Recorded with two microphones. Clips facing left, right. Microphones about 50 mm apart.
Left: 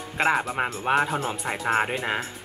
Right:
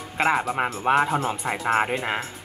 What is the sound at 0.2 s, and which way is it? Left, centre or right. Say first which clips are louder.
Speech: right 1 dB; centre.